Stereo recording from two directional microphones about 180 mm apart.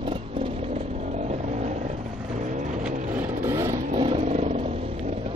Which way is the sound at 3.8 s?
35° right (ahead or behind).